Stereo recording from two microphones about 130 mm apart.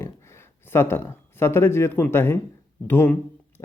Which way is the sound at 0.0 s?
20° left (ahead or behind).